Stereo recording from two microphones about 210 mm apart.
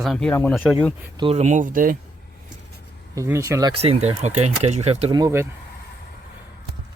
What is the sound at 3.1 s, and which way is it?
Speech, 15° right (ahead or behind).